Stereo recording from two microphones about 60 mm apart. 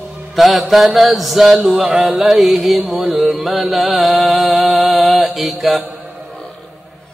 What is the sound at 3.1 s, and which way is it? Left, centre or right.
Mantra, right.